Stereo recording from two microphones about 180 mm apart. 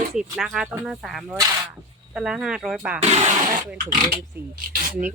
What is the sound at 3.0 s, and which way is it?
Speech, 35° right (ahead or behind).